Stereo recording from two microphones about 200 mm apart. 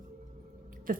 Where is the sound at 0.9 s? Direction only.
45° right (ahead or behind).